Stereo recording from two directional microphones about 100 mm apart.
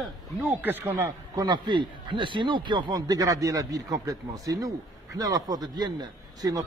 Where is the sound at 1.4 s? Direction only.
50° right (ahead or behind).